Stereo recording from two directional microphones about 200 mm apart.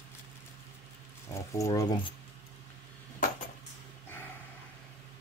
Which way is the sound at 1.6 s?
15° left (ahead or behind).